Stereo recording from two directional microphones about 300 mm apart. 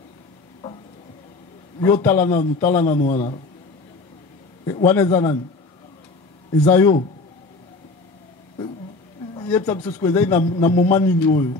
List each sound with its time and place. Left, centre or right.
1.8 s speech: centre
3.0 s a man's voice: left
4.6 s speech: centre
6.5 s speech: centre
9.3 s speech: centre